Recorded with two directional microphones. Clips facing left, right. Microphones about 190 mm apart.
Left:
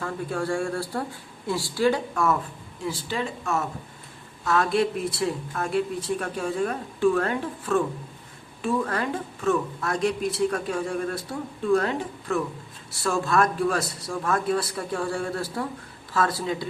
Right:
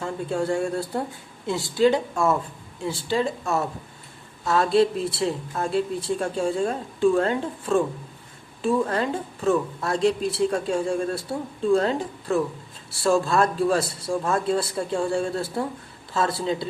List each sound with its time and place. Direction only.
0.0 s speech: 25° right (ahead or behind)